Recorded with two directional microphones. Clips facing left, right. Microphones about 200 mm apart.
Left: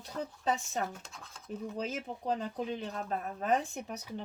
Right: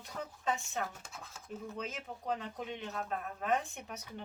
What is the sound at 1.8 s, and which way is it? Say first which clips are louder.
Speech: left 5 dB; 35° left (ahead or behind).